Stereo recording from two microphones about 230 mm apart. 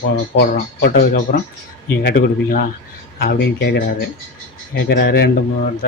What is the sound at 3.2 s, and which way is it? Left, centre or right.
Speech, left.